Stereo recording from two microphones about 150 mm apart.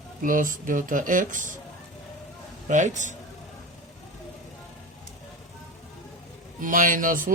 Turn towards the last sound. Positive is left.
turn(degrees=-65)  # may be behind; listen again after turning